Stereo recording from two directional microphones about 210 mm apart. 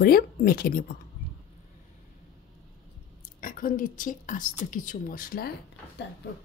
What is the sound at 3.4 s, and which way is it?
A woman's voice, 40° left (ahead or behind).